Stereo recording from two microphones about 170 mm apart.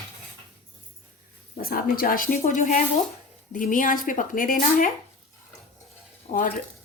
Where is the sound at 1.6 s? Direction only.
60° left (ahead or behind).